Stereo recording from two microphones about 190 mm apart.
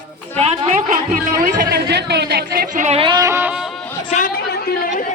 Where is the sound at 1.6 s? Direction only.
60° right (ahead or behind).